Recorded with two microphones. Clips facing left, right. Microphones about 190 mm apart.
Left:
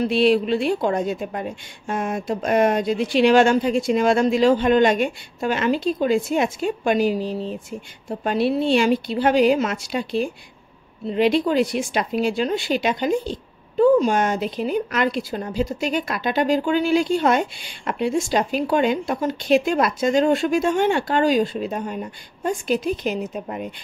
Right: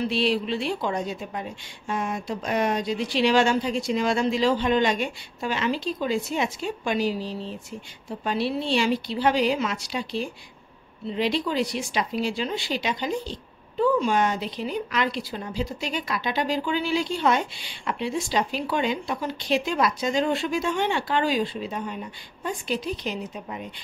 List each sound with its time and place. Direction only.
0.0 s speech: 55° left (ahead or behind)